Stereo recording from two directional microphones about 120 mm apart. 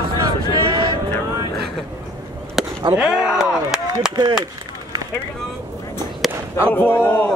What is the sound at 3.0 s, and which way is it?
Speech, 5° right (ahead or behind).